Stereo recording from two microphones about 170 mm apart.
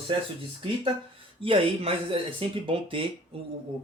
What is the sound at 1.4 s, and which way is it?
Speech, 30° right (ahead or behind).